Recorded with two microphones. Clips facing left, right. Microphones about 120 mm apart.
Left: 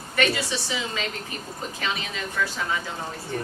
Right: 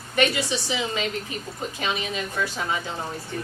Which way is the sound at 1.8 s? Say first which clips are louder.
Right 3 dB; 20° right (ahead or behind).